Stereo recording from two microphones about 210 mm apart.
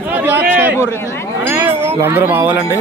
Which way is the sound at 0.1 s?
10° right (ahead or behind).